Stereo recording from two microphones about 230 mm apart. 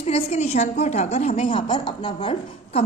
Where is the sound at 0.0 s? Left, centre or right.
Left.